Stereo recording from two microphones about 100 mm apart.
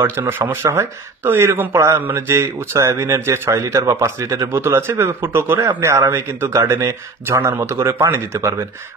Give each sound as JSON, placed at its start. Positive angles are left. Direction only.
{"t": 0.3, "sound": "speech", "side_deg": -25}